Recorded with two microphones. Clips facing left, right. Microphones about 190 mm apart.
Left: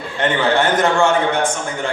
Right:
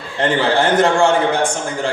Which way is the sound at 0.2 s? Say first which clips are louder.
Right 1 dB; 30° right (ahead or behind).